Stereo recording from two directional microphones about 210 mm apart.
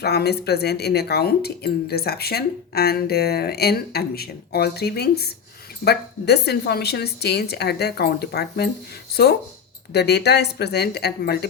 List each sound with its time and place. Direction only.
0.0 s speech: 50° left (ahead or behind)